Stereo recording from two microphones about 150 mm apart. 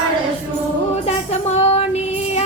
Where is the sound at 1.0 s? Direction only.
45° left (ahead or behind).